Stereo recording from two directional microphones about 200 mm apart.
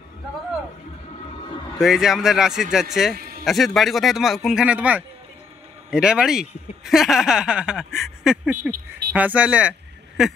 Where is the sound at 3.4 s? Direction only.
Centre (ahead or behind).